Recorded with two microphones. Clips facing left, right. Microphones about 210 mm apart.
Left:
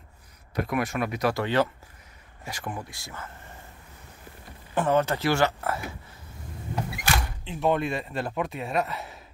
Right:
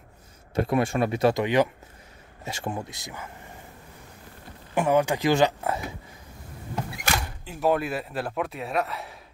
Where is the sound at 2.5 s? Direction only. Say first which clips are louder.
Right 3 dB; 25° right (ahead or behind).